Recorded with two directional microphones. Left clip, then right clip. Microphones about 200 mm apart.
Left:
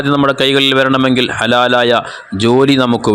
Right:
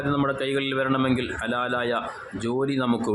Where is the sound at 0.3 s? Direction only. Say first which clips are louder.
Left 14 dB; 45° left (ahead or behind).